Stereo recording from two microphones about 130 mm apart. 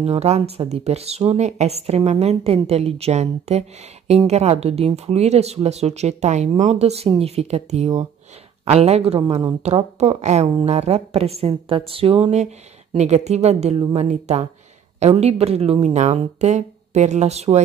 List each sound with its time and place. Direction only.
0.0 s speech: 55° right (ahead or behind)